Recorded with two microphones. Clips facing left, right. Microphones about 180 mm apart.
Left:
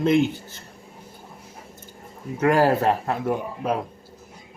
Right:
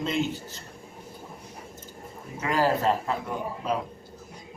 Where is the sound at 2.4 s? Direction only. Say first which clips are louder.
Left 6 dB; 55° left (ahead or behind).